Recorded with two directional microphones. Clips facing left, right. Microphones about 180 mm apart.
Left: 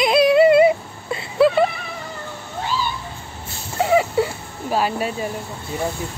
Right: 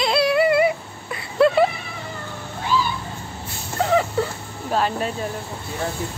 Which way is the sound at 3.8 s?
10° left (ahead or behind).